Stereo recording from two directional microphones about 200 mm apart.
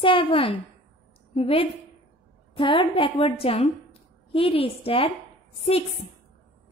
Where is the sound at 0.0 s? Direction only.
25° left (ahead or behind).